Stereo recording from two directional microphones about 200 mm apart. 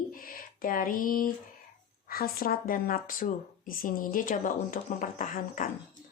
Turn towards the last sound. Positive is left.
turn(degrees=40)  # may be behind; listen again after turning